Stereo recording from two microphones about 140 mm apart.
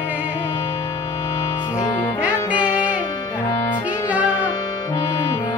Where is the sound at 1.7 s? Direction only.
30° left (ahead or behind).